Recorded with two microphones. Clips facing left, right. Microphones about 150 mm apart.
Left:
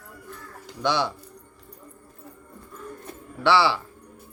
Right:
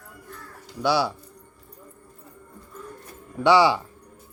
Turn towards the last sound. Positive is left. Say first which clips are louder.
# right 3 dB
turn(degrees=-15)  # may be behind; listen again after turning